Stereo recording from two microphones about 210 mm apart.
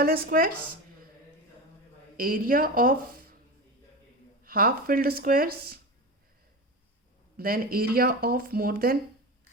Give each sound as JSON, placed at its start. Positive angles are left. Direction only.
{"t": 0.0, "sound": "speech", "side_deg": -45}
{"t": 2.1, "sound": "speech", "side_deg": -40}
{"t": 4.4, "sound": "speech", "side_deg": -45}
{"t": 7.3, "sound": "speech", "side_deg": -45}